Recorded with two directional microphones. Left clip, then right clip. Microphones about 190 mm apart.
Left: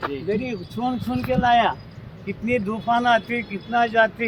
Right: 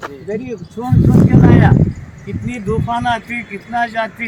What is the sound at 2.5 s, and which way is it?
A man's voice, 60° left (ahead or behind).